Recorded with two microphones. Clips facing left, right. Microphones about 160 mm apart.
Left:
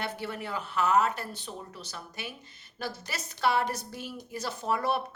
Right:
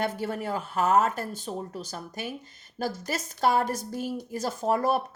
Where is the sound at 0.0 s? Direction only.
45° right (ahead or behind).